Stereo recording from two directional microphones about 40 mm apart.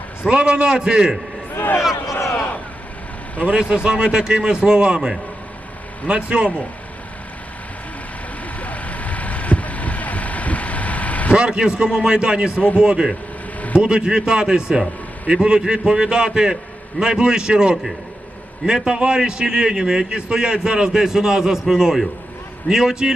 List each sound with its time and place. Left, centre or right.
0.3 s a man's voice: right
1.8 s speech: centre
3.5 s a man's voice: right
8.5 s vehicle: left
11.3 s a man's voice: right